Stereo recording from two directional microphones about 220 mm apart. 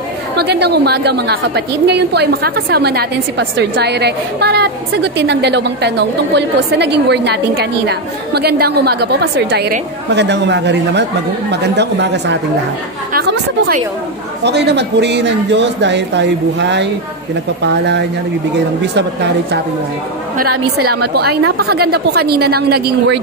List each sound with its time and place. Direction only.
0.4 s a woman's voice: 50° right (ahead or behind)